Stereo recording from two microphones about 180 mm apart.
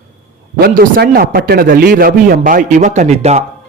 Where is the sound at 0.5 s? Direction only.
55° right (ahead or behind).